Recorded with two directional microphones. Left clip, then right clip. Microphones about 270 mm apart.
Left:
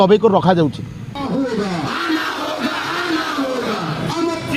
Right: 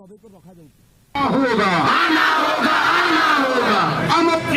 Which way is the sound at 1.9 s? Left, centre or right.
Centre.